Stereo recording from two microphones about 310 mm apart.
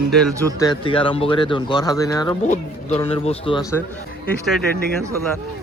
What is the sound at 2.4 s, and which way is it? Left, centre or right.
Speech, left.